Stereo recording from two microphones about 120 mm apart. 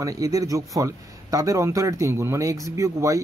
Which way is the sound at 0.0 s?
30° right (ahead or behind).